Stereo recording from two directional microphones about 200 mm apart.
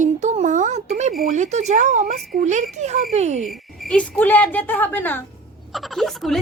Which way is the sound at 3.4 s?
Centre (ahead or behind).